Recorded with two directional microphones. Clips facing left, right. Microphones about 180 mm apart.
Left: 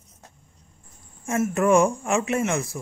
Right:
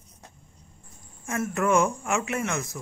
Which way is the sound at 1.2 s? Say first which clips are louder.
Left 5 dB; 25° left (ahead or behind).